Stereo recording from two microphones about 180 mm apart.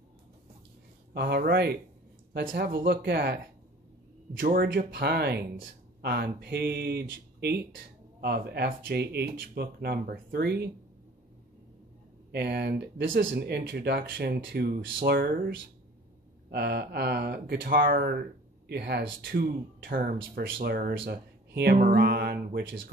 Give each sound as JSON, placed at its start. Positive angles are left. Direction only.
{"t": 1.1, "sound": "speech", "side_deg": -65}
{"t": 4.4, "sound": "speech", "side_deg": -50}
{"t": 12.3, "sound": "speech", "side_deg": -65}
{"t": 16.4, "sound": "speech", "side_deg": -65}
{"t": 19.3, "sound": "speech", "side_deg": -55}
{"t": 20.9, "sound": "speech", "side_deg": -80}